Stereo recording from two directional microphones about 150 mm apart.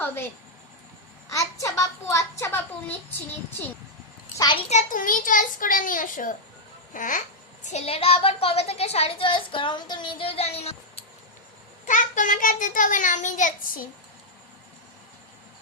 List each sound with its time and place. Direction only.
1.3 s a sound: 20° left (ahead or behind)
4.4 s a child's voice: 30° left (ahead or behind)
4.7 s a child's voice: 55° left (ahead or behind)
11.9 s a child's voice: 60° left (ahead or behind)